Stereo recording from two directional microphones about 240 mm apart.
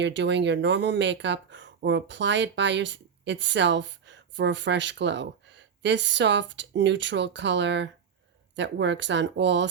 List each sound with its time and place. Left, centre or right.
0.0 s speech: right